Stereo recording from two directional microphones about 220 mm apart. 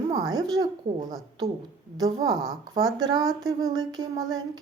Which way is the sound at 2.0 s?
15° right (ahead or behind).